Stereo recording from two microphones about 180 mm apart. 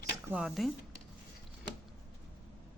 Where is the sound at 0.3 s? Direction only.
5° right (ahead or behind).